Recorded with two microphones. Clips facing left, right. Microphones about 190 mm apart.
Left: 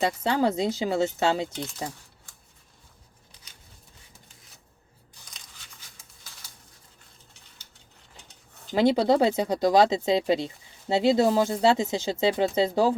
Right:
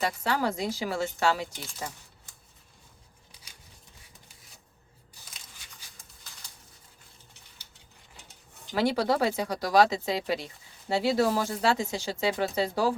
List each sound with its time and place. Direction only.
0.0 s speech: 20° left (ahead or behind)
8.7 s speech: 20° left (ahead or behind)